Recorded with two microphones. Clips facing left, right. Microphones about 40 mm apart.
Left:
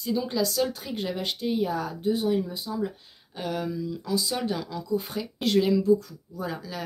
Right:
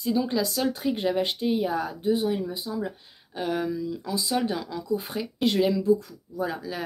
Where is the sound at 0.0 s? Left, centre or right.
Centre.